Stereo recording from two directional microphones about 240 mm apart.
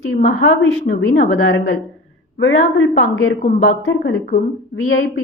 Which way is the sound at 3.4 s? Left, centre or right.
Left.